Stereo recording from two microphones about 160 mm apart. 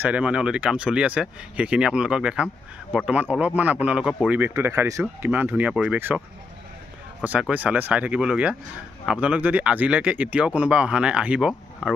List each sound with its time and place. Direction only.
0.0 s speech: 10° right (ahead or behind)
7.2 s speech: 10° right (ahead or behind)